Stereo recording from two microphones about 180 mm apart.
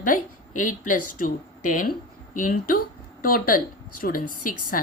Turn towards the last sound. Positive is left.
turn(degrees=50)  # may be behind; listen again after turning